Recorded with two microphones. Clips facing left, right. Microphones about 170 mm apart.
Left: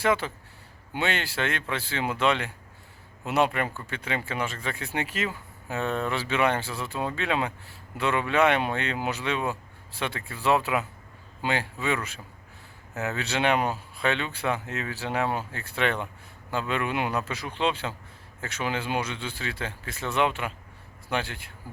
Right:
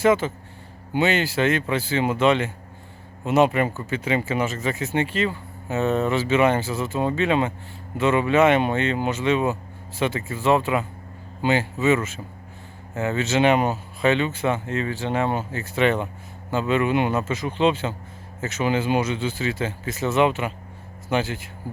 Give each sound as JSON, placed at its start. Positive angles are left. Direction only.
{"t": 0.0, "sound": "speech", "side_deg": -5}
{"t": 4.9, "sound": "speech", "side_deg": 5}